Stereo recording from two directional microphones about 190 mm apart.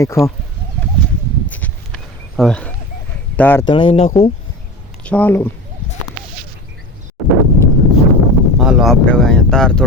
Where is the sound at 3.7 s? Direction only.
25° left (ahead or behind).